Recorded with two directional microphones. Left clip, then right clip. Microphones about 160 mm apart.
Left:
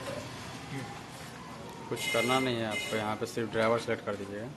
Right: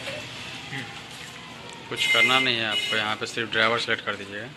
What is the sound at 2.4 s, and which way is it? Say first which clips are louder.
Speech: right 9 dB; 20° left (ahead or behind).